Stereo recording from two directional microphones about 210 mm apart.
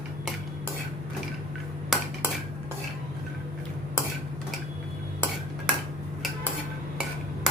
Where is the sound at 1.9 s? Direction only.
Centre (ahead or behind).